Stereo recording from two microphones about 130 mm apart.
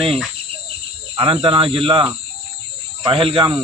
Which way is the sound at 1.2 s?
40° right (ahead or behind).